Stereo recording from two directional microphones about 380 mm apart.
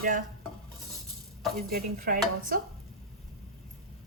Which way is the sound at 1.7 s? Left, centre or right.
Right.